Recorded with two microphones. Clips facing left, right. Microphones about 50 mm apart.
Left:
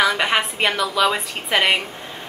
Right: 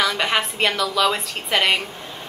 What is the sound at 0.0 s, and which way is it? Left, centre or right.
A woman's voice, centre.